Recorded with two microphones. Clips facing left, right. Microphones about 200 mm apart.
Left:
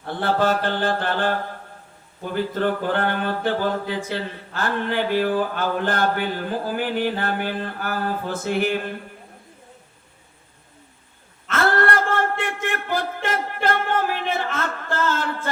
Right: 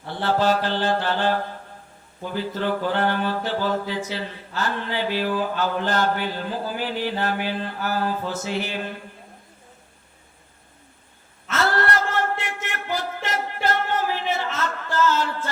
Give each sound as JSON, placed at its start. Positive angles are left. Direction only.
{"t": 0.2, "sound": "mantra", "side_deg": 55}
{"t": 2.3, "sound": "mantra", "side_deg": 55}
{"t": 11.4, "sound": "a sound", "side_deg": 55}